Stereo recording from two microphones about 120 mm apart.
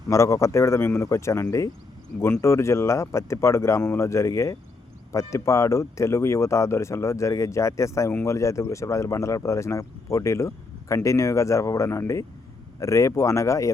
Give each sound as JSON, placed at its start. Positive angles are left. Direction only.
{"t": 0.1, "sound": "speech", "side_deg": 25}